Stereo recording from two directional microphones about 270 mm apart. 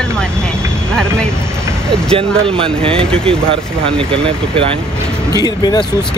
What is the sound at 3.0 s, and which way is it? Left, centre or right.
Speech, centre.